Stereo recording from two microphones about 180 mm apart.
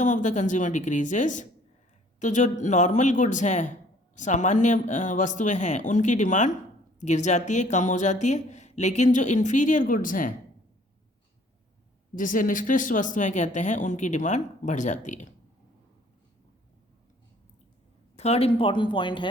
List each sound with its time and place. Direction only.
0.0 s speech: 45° left (ahead or behind)
12.1 s speech: 50° left (ahead or behind)
18.2 s speech: 35° left (ahead or behind)